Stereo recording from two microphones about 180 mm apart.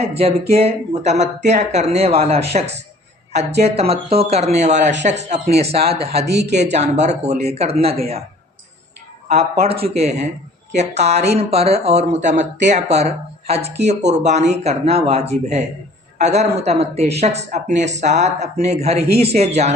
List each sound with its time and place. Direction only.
0.0 s speech: 35° right (ahead or behind)
6.2 s speech: 65° right (ahead or behind)
6.5 s speech: 40° right (ahead or behind)
9.8 s speech: 35° right (ahead or behind)